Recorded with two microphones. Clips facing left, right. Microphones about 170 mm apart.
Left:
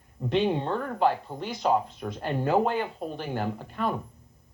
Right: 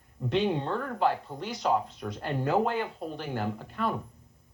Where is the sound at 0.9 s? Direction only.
55° left (ahead or behind).